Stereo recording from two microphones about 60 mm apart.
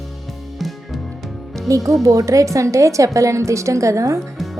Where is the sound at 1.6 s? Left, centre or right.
Right.